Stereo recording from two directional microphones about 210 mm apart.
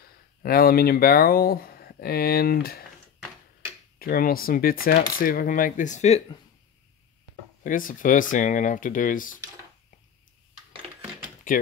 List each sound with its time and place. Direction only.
0.0 s speech: 45° left (ahead or behind)
4.0 s speech: 45° left (ahead or behind)
7.6 s speech: 40° left (ahead or behind)
11.5 s speech: 40° left (ahead or behind)